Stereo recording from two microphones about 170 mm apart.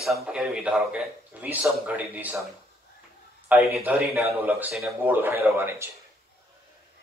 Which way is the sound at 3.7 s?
10° right (ahead or behind).